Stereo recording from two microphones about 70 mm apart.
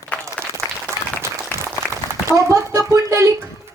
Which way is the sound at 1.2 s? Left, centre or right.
Right.